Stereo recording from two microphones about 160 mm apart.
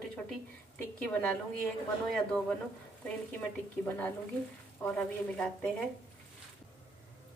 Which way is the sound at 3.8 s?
10° left (ahead or behind).